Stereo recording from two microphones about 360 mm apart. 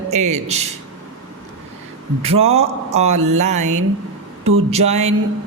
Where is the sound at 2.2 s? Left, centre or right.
Centre.